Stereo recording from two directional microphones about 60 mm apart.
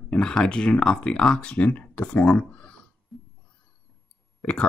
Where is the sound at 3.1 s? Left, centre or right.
Centre.